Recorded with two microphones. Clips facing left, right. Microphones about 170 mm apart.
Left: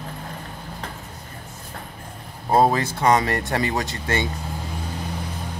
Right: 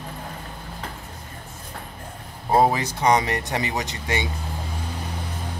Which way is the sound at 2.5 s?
15° right (ahead or behind).